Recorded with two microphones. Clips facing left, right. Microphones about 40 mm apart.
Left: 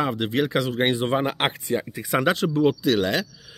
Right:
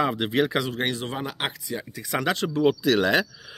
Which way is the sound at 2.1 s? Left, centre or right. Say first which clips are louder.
Left 4 dB; centre.